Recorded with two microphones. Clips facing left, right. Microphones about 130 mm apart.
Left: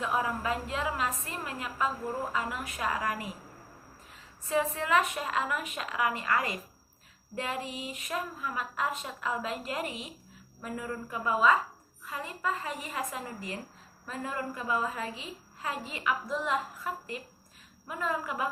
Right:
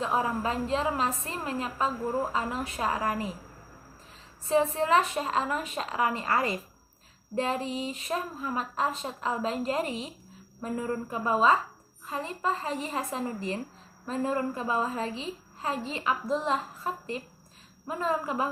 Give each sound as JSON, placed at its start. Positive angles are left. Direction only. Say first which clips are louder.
{"t": 0.0, "sound": "a woman's voice", "louder": "right 3 dB", "side_deg": -30}
{"t": 4.4, "sound": "a woman's voice", "louder": "right 5 dB", "side_deg": -30}